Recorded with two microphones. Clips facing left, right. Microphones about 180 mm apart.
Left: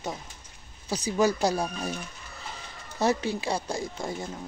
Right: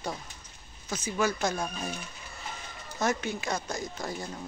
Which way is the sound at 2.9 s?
30° left (ahead or behind).